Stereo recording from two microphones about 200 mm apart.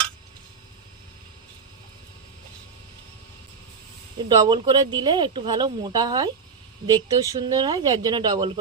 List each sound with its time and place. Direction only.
4.3 s speech: 20° right (ahead or behind)